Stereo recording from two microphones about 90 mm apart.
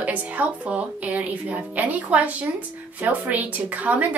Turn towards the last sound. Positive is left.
turn(degrees=-15)  # may be behind; listen again after turning